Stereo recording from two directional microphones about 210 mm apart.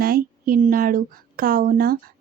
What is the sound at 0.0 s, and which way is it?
Speech, 45° right (ahead or behind).